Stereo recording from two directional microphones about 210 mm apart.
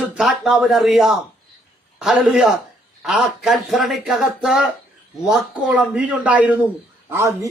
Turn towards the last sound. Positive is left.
turn(degrees=-15)  # may be behind; listen again after turning